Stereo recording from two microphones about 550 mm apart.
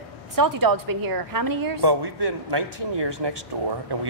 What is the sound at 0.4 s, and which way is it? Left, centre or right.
A woman's voice, right.